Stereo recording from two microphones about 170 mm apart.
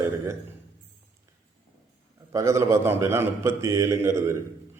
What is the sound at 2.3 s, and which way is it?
A man's voice, 15° right (ahead or behind).